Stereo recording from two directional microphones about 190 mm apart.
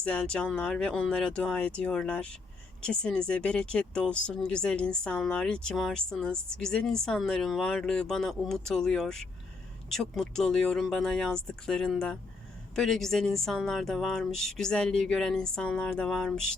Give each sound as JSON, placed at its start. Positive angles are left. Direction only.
{"t": 0.0, "sound": "speech", "side_deg": 5}